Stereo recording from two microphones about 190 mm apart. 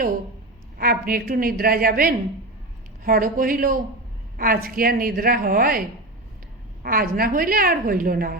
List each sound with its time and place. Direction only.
0.8 s a woman's voice: 50° right (ahead or behind)
6.8 s a woman's voice: 50° right (ahead or behind)